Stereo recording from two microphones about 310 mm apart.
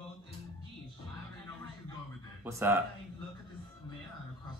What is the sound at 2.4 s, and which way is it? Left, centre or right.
Speech, centre.